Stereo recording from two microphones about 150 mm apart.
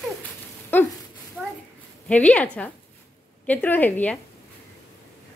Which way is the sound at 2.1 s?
10° left (ahead or behind).